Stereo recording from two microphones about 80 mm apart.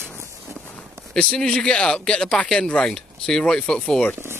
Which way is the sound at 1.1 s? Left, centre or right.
Centre.